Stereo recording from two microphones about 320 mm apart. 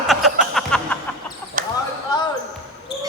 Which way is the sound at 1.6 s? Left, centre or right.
Right.